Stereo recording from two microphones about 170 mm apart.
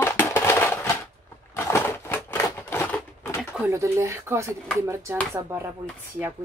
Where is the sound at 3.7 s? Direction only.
15° right (ahead or behind).